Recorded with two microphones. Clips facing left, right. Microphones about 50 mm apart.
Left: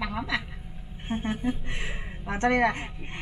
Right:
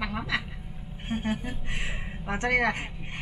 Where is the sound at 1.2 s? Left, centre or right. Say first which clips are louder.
Left 4 dB; centre.